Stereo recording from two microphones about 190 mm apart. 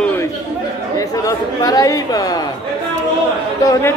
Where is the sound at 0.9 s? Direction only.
15° left (ahead or behind).